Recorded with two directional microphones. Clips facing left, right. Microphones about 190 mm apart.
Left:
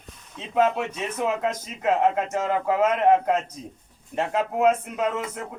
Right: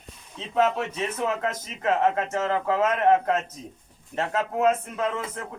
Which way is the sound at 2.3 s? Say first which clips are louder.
Left 1 dB; 10° left (ahead or behind).